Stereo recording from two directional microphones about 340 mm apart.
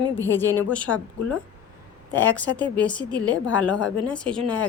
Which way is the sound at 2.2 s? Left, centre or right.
Centre.